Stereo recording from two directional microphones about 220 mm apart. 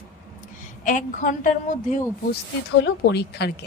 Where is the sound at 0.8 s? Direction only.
35° left (ahead or behind).